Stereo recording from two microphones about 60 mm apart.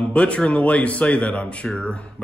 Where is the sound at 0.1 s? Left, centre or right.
Centre.